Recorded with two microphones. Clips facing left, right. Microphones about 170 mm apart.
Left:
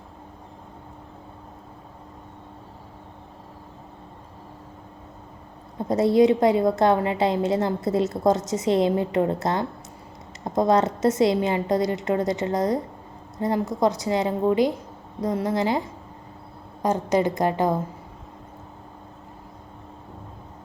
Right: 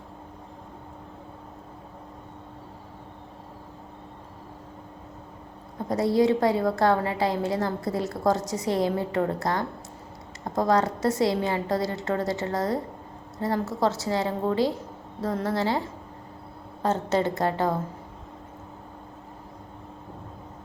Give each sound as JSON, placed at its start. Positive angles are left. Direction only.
{"t": 5.9, "sound": "a woman's voice", "side_deg": 20}
{"t": 16.8, "sound": "a woman's voice", "side_deg": 15}